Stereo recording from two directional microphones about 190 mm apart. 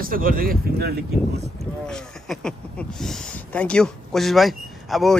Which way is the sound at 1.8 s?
5° left (ahead or behind).